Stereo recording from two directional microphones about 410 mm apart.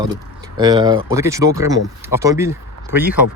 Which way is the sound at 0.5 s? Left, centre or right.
Centre.